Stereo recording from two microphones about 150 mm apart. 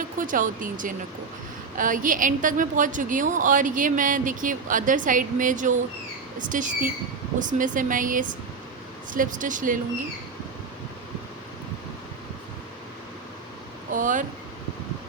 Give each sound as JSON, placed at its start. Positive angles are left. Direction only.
{"t": 0.2, "sound": "a woman's voice", "side_deg": -60}
{"t": 13.9, "sound": "a woman's voice", "side_deg": -60}